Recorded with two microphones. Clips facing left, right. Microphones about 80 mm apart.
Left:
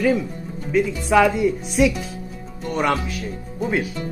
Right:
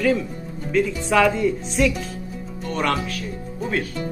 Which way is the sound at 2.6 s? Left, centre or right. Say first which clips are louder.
Left 2 dB; centre.